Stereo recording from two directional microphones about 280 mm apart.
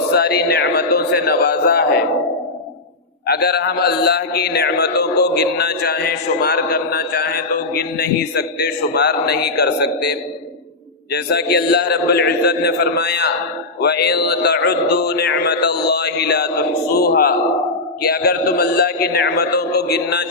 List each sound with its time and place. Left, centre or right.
0.1 s a man's voice: left
3.3 s a man's voice: left